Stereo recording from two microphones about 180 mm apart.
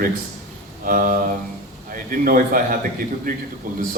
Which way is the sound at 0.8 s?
50° right (ahead or behind).